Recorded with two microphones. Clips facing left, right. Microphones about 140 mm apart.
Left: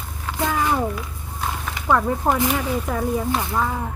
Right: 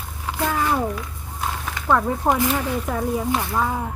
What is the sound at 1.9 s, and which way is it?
Speech, centre (ahead or behind).